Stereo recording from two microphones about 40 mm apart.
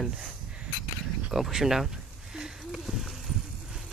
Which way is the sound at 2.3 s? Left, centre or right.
Centre.